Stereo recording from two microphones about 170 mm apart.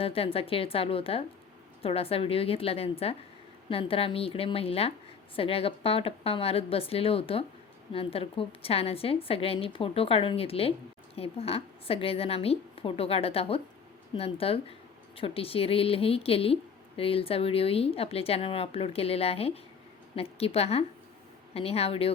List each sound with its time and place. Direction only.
0.0 s a woman's voice: 35° left (ahead or behind)